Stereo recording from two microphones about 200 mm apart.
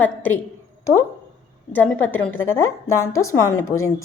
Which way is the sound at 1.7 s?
10° left (ahead or behind).